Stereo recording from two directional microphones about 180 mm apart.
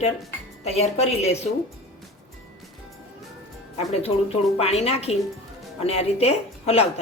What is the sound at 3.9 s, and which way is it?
Speech, 35° left (ahead or behind).